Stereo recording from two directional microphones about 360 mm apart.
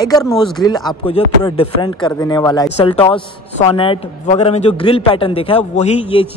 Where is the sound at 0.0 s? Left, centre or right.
Centre.